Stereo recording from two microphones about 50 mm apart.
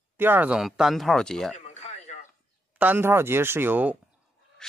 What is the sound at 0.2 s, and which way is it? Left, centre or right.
Speech, right.